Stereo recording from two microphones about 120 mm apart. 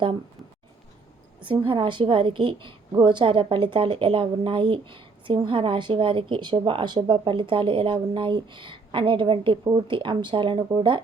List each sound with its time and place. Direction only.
1.5 s a woman's voice: 45° right (ahead or behind)